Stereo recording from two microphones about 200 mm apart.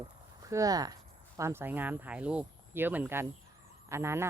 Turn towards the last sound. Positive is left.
turn(degrees=-15)  # may be behind; listen again after turning